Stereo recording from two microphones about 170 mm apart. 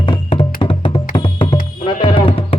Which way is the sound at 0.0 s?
30° left (ahead or behind).